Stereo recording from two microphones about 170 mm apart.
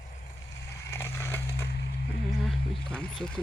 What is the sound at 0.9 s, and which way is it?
Crushing, 15° left (ahead or behind).